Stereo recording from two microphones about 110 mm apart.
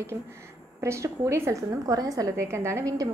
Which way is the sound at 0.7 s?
25° right (ahead or behind).